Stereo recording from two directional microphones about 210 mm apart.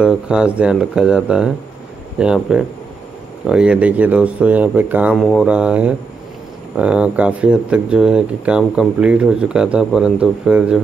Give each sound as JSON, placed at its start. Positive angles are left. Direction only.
{"t": 0.0, "sound": "speech", "side_deg": -5}